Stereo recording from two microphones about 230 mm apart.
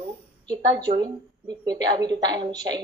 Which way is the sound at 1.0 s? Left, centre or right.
Centre.